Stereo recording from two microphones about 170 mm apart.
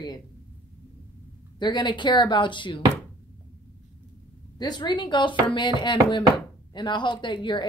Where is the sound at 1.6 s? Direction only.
25° left (ahead or behind).